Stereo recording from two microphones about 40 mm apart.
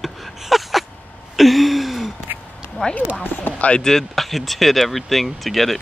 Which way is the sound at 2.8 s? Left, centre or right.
Left.